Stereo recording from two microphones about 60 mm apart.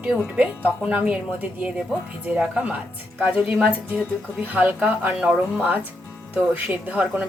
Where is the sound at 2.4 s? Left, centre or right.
Right.